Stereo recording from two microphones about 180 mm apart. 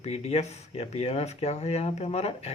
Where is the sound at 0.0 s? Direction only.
35° left (ahead or behind).